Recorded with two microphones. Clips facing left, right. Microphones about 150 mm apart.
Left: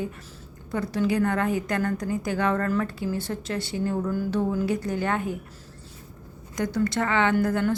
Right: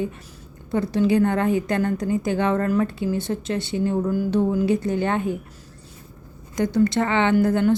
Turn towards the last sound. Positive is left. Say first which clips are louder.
# right 4 dB
turn(degrees=-25)  # may be behind; listen again after turning